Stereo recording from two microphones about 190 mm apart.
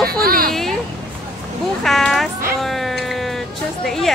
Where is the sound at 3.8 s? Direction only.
Centre (ahead or behind).